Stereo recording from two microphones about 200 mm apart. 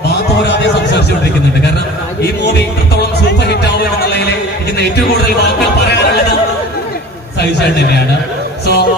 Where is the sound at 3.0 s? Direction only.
55° left (ahead or behind).